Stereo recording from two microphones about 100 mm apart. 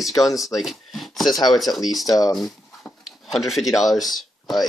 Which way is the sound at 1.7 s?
Centre (ahead or behind).